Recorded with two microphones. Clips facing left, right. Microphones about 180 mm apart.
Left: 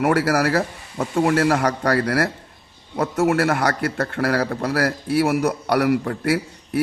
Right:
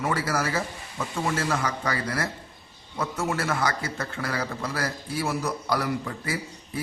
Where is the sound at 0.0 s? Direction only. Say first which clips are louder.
Left 8 dB; 70° left (ahead or behind).